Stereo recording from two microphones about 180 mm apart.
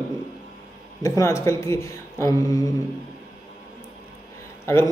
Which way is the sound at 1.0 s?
15° left (ahead or behind).